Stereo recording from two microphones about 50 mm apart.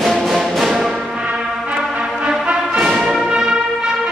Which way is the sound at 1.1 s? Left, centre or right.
Centre.